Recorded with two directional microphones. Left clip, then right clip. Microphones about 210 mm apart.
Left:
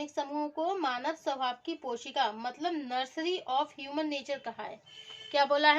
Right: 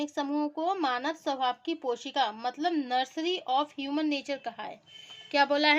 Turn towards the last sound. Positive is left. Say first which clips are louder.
# right 1 dB
turn(degrees=-45)  # may be behind; listen again after turning